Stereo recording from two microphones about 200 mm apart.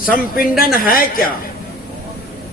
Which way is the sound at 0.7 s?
45° left (ahead or behind).